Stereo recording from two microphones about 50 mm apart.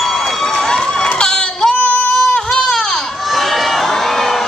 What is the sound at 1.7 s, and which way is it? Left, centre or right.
Female singing, left.